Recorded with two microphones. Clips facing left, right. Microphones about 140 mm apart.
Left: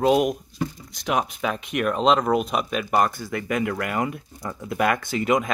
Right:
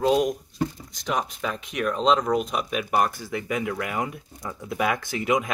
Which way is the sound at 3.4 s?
70° left (ahead or behind).